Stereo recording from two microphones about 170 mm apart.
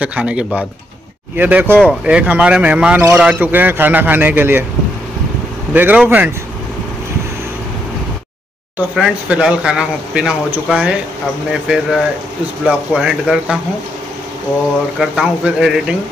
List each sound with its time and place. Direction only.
0.0 s a man's voice: 10° right (ahead or behind)
5.7 s a man's voice: 10° right (ahead or behind)
8.9 s speech: 5° right (ahead or behind)
15.0 s speech: 5° right (ahead or behind)